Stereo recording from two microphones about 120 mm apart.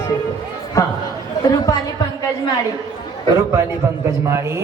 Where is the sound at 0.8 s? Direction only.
25° left (ahead or behind).